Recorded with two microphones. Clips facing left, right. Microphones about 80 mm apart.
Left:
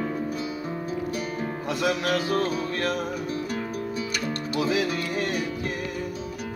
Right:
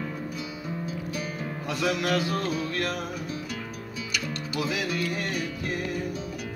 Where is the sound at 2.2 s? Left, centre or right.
Left.